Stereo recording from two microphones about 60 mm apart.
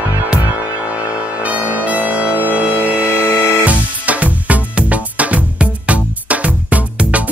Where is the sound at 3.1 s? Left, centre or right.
Left.